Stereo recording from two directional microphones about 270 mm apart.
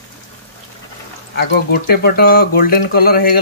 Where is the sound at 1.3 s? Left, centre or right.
Left.